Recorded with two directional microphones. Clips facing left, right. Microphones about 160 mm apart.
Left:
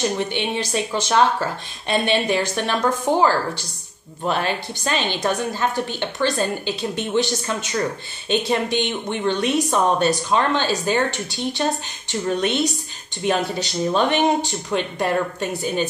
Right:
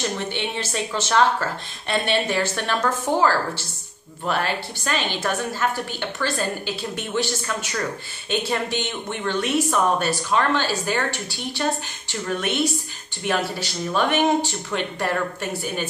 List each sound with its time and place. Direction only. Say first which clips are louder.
0.0 s a woman's voice: left 4 dB; 15° left (ahead or behind)